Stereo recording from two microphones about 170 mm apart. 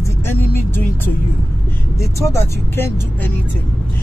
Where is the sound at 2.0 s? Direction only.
15° left (ahead or behind).